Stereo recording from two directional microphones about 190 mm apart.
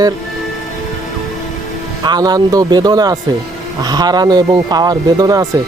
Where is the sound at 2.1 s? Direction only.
20° right (ahead or behind).